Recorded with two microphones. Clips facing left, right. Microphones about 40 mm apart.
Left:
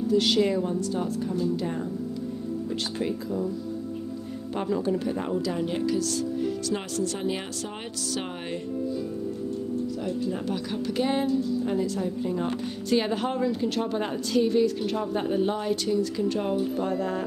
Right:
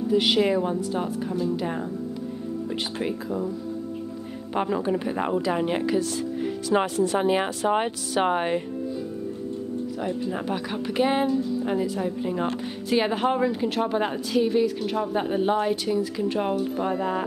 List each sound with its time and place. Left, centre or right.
0.1 s speech: right
1.3 s speech: centre
3.0 s speech: right
4.6 s speech: right
10.0 s speech: right